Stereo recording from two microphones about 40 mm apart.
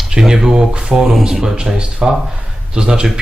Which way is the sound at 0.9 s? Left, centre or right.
Centre.